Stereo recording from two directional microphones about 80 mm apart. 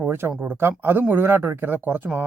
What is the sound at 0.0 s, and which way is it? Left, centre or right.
Speech, right.